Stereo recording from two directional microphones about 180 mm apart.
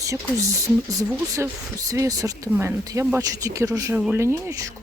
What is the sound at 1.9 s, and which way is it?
Speech, 20° right (ahead or behind).